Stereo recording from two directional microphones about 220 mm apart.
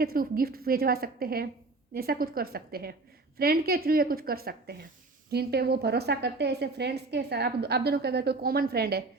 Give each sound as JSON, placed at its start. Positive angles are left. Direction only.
{"t": 0.0, "sound": "a woman's voice", "side_deg": -40}